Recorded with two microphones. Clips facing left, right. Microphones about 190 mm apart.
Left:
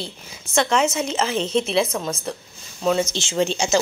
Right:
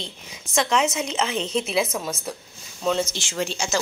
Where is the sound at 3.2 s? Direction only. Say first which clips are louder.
Left 6 dB; 25° left (ahead or behind).